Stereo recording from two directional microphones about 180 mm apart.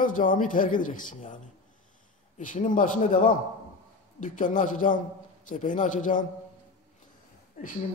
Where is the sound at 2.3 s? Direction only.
45° left (ahead or behind).